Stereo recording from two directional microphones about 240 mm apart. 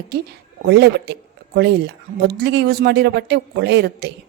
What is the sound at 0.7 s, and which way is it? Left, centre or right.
Speech, right.